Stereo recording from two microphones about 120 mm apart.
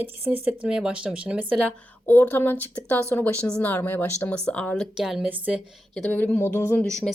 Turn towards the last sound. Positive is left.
turn(degrees=5)  # may be behind; listen again after turning